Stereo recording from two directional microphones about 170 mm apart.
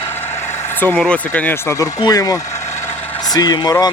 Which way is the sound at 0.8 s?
10° left (ahead or behind).